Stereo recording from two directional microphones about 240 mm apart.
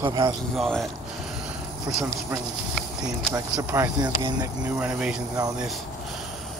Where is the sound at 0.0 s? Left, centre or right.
Centre.